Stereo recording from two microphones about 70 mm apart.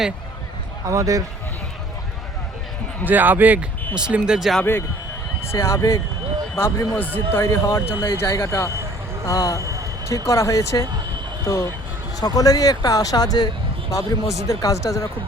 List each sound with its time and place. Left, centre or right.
0.9 s a man's voice: right
3.0 s speech: right
3.9 s speech: centre
5.5 s speech: left
8.3 s speech: left
9.6 s speech: right
10.2 s speech: left
12.2 s speech: left
13.9 s speech: left